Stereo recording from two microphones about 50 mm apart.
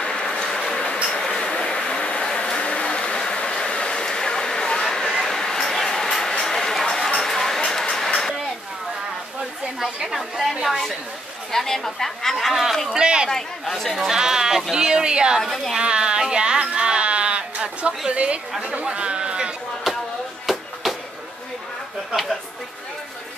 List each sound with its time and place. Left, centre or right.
0.0 s train: centre
1.1 s a sound: centre
9.9 s a woman's voice: centre
11.5 s speech: centre
12.9 s speech: centre
13.3 s speech: centre
14.1 s speech: centre
15.4 s speech: centre
15.7 s a sound: centre
18.6 s speech: right
20.5 s a sound: centre